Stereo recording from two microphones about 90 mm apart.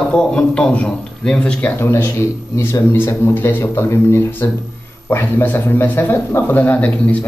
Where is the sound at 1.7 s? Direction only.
30° left (ahead or behind).